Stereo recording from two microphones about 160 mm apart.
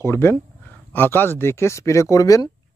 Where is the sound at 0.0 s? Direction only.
15° left (ahead or behind).